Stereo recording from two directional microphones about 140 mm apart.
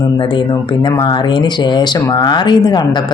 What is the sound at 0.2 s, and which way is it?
Speech, 35° left (ahead or behind).